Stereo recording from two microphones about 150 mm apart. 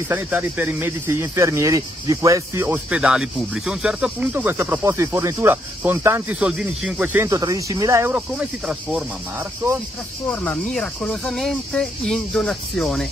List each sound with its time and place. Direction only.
0.1 s speech: 15° right (ahead or behind)
6.4 s speech: 5° right (ahead or behind)
8.3 s speech: 5° right (ahead or behind)
10.3 s speech: 10° left (ahead or behind)